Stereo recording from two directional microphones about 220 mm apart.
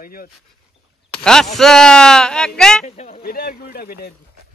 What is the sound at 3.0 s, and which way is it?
Speech, 40° left (ahead or behind).